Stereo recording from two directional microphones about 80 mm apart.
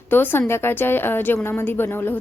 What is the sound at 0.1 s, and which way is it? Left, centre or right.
A woman's voice, left.